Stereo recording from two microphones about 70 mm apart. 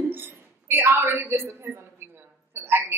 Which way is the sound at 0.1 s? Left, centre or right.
Right.